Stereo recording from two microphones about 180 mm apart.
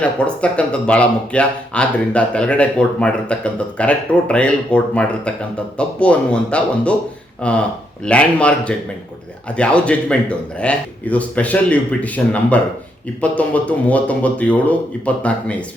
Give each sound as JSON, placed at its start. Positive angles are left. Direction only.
{"t": 0.0, "sound": "speech", "side_deg": 5}